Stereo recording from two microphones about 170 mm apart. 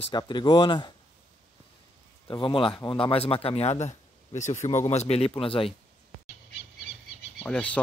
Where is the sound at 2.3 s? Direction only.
30° left (ahead or behind).